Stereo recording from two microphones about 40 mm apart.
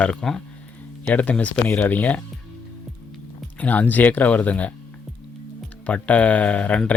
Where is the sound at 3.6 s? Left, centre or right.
Left.